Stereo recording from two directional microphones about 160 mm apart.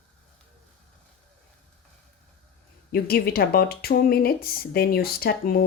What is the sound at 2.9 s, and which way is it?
Speech, 75° left (ahead or behind).